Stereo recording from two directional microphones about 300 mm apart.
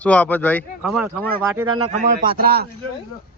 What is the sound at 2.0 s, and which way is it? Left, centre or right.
Speech, right.